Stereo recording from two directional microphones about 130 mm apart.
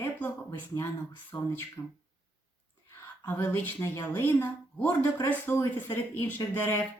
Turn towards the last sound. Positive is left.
turn(degrees=20)  # may be behind; listen again after turning